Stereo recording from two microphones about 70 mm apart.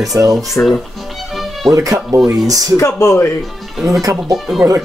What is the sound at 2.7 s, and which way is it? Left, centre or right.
Speech, left.